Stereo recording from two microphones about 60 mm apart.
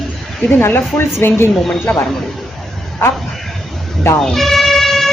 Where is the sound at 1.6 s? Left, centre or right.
Centre.